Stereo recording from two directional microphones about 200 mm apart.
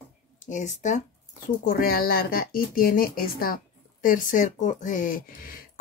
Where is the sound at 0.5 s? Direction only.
35° left (ahead or behind).